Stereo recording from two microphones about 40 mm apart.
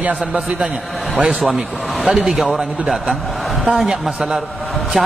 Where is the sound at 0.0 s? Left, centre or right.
Right.